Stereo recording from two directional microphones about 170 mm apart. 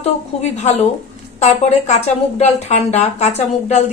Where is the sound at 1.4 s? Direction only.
40° left (ahead or behind).